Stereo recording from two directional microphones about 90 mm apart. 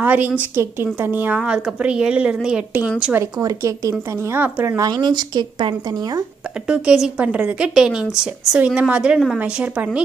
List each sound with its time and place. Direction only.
0.0 s a woman's voice: 20° right (ahead or behind)
1.4 s speech: 10° right (ahead or behind)
3.2 s a woman's voice: 35° right (ahead or behind)
4.6 s speech: 40° right (ahead or behind)
6.7 s speech: 10° right (ahead or behind)